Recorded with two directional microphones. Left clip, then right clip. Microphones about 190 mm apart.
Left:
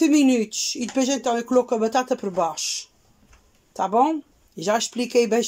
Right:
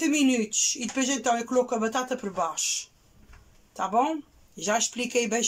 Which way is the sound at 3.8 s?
25° left (ahead or behind).